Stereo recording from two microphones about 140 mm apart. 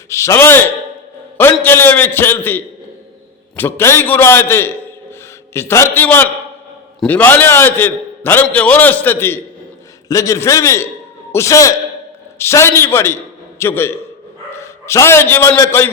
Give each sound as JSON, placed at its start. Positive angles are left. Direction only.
{"t": 0.1, "sound": "a man's voice", "side_deg": 20}
{"t": 1.6, "sound": "a man's voice", "side_deg": 15}